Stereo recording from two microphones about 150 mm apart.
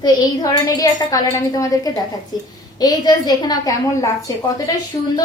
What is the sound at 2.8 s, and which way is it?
A woman's voice, 25° left (ahead or behind).